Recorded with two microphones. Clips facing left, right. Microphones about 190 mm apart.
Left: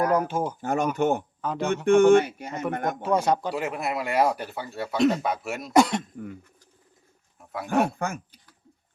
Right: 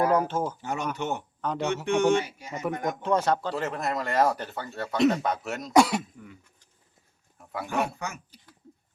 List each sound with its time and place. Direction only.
0.1 s speech: 10° left (ahead or behind)
0.6 s speech: 50° left (ahead or behind)
1.4 s speech: centre (ahead or behind)
1.7 s speech: 50° left (ahead or behind)
2.5 s speech: 5° right (ahead or behind)
3.0 s speech: 10° left (ahead or behind); by 6.1 s 5° right (ahead or behind)
6.1 s a sound: 50° left (ahead or behind)
7.3 s wild animals: centre (ahead or behind)
7.9 s speech: 50° left (ahead or behind)